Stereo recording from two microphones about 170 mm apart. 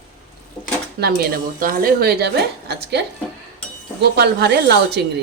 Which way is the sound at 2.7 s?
80° right.